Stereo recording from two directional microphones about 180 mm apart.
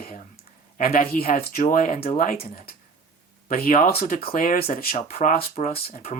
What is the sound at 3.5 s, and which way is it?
Speech, 50° left (ahead or behind).